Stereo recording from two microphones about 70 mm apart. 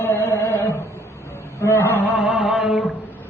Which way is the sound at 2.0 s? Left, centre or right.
Right.